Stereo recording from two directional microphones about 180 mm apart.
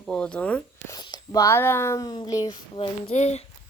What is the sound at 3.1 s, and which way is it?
Speech, 40° left (ahead or behind).